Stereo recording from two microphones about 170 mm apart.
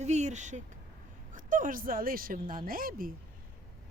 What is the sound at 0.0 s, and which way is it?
A woman's voice, 40° right (ahead or behind).